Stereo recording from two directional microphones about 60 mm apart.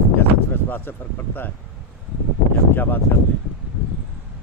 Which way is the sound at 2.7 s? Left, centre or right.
Left.